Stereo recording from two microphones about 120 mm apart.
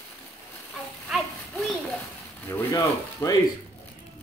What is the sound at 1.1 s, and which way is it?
Children playing, centre (ahead or behind).